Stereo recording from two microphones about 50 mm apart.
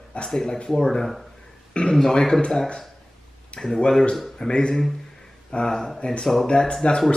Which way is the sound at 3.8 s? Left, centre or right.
Centre.